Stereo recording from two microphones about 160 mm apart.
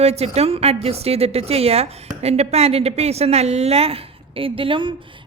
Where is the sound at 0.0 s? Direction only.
40° right (ahead or behind).